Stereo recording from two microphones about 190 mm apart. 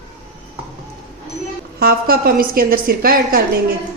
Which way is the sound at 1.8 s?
50° right (ahead or behind).